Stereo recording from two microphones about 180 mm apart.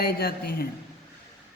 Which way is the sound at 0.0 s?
60° left (ahead or behind).